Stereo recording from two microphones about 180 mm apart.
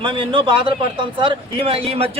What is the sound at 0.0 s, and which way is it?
A man's voice, 30° right (ahead or behind).